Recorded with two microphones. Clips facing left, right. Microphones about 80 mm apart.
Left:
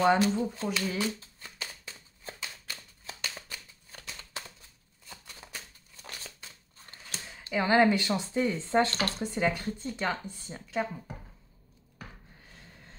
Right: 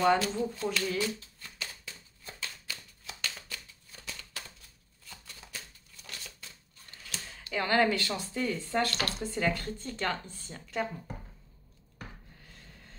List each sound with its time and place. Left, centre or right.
0.0 s speech: centre
0.9 s shuffling cards: left
4.4 s a sound: left
5.0 s shuffling cards: centre
7.5 s speech: centre